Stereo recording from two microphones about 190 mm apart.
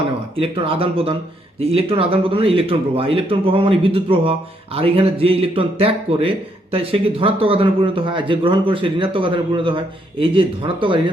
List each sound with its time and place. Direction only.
0.3 s speech: 30° right (ahead or behind)